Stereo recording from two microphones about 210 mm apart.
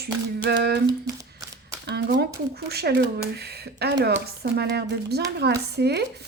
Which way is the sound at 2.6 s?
50° right (ahead or behind).